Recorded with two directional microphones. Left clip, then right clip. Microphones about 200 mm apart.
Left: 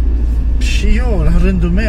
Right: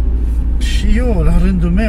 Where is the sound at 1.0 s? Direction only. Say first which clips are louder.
Right 1 dB; 25° right (ahead or behind).